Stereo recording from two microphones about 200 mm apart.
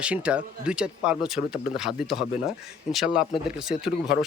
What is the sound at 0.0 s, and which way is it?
A man's voice, 5° right (ahead or behind).